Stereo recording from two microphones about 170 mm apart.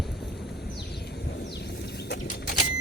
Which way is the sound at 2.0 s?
70° left (ahead or behind).